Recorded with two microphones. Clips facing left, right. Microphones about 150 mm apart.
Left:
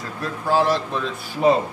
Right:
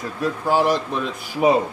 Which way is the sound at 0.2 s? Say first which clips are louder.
Right 1 dB; 15° right (ahead or behind).